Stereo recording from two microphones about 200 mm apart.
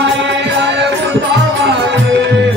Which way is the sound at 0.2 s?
60° right (ahead or behind).